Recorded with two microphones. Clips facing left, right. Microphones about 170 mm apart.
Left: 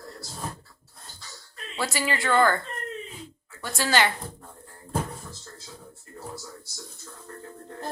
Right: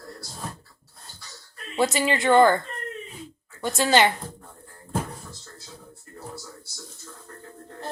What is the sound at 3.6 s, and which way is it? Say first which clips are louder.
Speech: right 4 dB; 20° right (ahead or behind).